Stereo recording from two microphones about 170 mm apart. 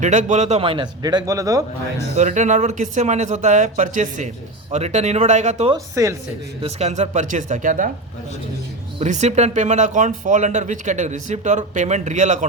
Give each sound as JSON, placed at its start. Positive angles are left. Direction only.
{"t": 0.0, "sound": "a man's voice", "side_deg": -45}
{"t": 2.1, "sound": "speech", "side_deg": -45}
{"t": 5.7, "sound": "speech", "side_deg": -20}
{"t": 6.6, "sound": "speech", "side_deg": -40}
{"t": 9.0, "sound": "speech", "side_deg": -45}